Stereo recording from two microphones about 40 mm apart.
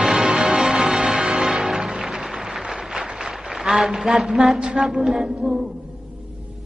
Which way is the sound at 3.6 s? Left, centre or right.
Centre.